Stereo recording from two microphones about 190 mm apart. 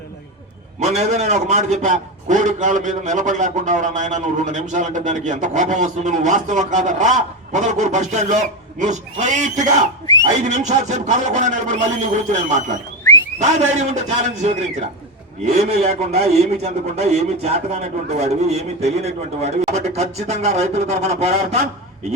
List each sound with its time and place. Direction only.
0.8 s a man's voice: 35° right (ahead or behind)
13.4 s a man's voice: 35° right (ahead or behind)